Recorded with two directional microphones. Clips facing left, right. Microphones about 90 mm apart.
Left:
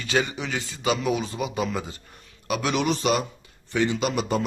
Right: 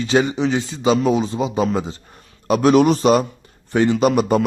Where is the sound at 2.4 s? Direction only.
40° right (ahead or behind).